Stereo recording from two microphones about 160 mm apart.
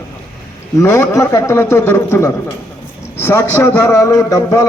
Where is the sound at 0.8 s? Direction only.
15° left (ahead or behind).